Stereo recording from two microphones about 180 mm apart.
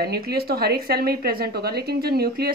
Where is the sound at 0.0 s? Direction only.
60° right (ahead or behind).